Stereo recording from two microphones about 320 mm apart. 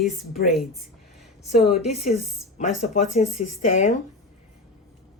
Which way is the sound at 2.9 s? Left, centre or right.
Left.